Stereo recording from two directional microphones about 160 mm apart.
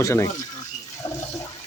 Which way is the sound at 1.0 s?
20° left (ahead or behind).